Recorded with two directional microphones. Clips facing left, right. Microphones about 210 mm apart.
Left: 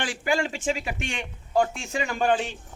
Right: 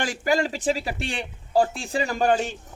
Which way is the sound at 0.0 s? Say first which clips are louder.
Right 3 dB; 40° right (ahead or behind).